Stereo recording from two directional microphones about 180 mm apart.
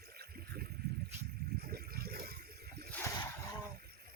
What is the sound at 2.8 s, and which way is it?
Splash, 10° left (ahead or behind).